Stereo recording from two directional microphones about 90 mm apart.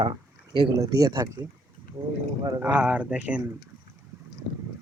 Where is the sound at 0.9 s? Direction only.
40° right (ahead or behind).